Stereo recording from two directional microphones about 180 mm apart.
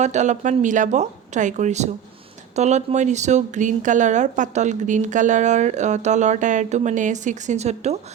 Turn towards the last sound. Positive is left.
turn(degrees=-35)  # may be behind; listen again after turning